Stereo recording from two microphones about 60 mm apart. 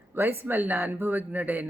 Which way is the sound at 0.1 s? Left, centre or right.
Right.